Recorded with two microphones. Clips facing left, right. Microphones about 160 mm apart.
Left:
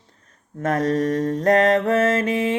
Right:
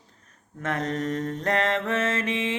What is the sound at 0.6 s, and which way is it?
Mantra, 40° left (ahead or behind).